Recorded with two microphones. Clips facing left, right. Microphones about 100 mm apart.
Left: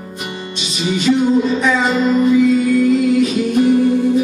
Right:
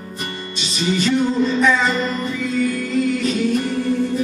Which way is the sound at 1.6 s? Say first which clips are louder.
Left 3 dB; 10° left (ahead or behind).